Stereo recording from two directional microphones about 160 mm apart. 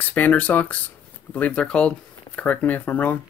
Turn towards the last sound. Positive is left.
turn(degrees=10)  # may be behind; listen again after turning